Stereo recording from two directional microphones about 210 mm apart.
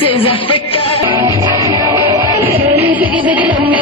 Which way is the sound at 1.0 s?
15° right (ahead or behind).